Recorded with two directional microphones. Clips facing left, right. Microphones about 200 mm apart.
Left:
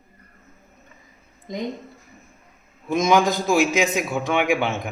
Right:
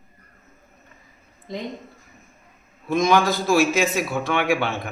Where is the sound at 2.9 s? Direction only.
20° left (ahead or behind).